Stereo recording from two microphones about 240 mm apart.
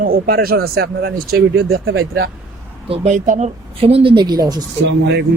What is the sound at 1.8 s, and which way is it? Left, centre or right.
Speech, right.